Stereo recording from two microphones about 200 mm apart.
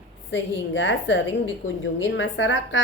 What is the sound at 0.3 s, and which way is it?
A woman's voice, 65° left (ahead or behind).